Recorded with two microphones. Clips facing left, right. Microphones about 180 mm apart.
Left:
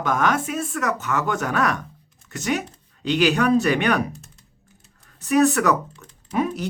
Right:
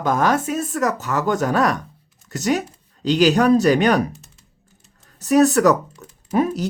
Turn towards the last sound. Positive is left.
turn(degrees=-40)  # may be behind; listen again after turning